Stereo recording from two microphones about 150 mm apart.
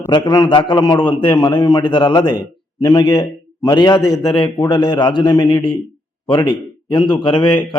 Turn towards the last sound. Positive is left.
turn(degrees=30)  # may be behind; listen again after turning